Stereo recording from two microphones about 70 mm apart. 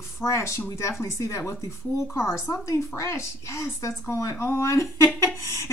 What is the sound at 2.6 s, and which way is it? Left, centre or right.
A woman's voice, left.